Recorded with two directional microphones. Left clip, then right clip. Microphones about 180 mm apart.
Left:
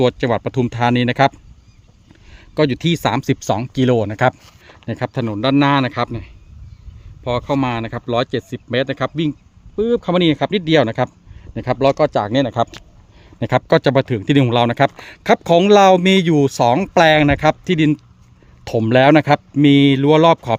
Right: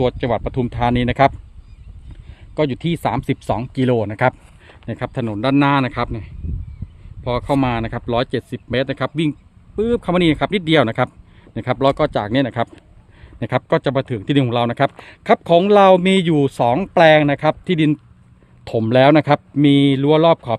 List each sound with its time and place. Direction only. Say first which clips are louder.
0.0 s speech: left 2 dB; 25° left (ahead or behind)
2.6 s speech: left 3 dB; 25° left (ahead or behind); by 12.6 s centre (ahead or behind)
13.4 s speech: left 4 dB; 15° left (ahead or behind)